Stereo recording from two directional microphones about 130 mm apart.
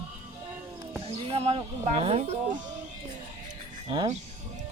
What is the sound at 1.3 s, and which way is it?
Speech, 50° right (ahead or behind).